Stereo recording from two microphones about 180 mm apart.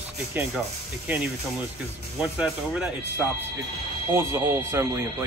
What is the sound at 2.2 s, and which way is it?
Speech, 5° right (ahead or behind).